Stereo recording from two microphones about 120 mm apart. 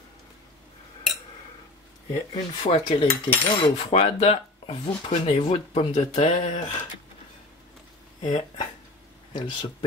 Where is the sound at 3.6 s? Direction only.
55° left (ahead or behind).